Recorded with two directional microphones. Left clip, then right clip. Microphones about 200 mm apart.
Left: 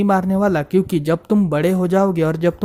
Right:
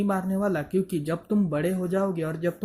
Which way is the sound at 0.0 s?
45° left (ahead or behind).